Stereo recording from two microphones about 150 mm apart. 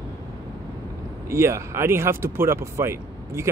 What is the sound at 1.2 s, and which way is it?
Speech, 20° right (ahead or behind).